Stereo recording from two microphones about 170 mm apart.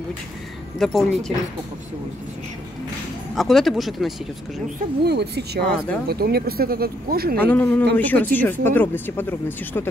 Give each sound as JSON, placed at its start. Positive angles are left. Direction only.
{"t": 0.7, "sound": "speech", "side_deg": 0}
{"t": 3.3, "sound": "speech", "side_deg": 0}
{"t": 5.0, "sound": "speech", "side_deg": -75}
{"t": 7.3, "sound": "speech", "side_deg": 10}